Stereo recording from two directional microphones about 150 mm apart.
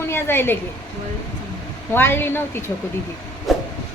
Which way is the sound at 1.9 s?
15° left (ahead or behind).